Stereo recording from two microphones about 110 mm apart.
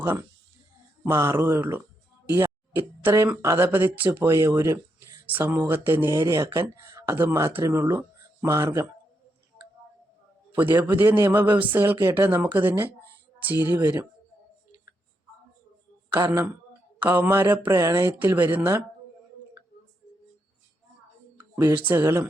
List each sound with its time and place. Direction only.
0.0 s speech: 20° right (ahead or behind)
2.3 s a sound: 20° right (ahead or behind)
3.4 s speech: 20° right (ahead or behind)
10.5 s a man's voice: 15° right (ahead or behind)
16.1 s speech: 25° right (ahead or behind)
21.5 s speech: 20° right (ahead or behind)